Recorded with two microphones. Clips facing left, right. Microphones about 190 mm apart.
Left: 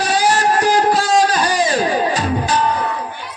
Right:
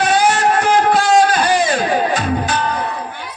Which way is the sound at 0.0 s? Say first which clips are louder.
Right 2 dB; 35° left (ahead or behind).